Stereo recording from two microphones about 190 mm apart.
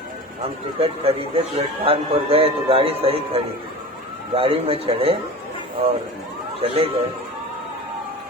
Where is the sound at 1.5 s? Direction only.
30° right (ahead or behind).